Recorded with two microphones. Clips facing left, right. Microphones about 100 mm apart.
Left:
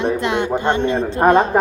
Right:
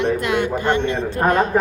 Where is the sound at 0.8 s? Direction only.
35° left (ahead or behind).